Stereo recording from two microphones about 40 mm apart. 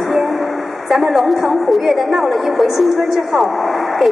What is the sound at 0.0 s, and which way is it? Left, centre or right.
A woman's voice, centre.